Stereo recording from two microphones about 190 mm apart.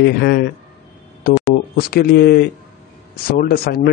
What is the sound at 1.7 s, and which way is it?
Speech, 50° left (ahead or behind).